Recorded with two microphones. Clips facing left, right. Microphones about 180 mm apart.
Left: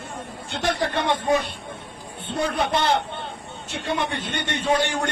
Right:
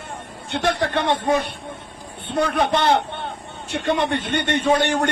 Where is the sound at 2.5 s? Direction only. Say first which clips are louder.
Right 3 dB; 60° right (ahead or behind).